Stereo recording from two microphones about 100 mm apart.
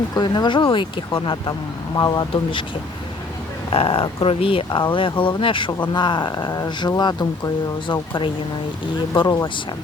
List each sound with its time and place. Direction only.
0.1 s speech: 45° left (ahead or behind)
2.3 s speech: 55° left (ahead or behind)
3.7 s speech: 70° left (ahead or behind); by 8.0 s 40° left (ahead or behind)
9.1 s speech: 45° left (ahead or behind)